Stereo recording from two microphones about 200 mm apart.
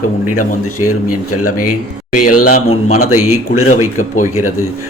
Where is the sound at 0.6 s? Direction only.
90° left.